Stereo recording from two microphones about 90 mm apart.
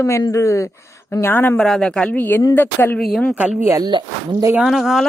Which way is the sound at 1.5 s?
5° left (ahead or behind).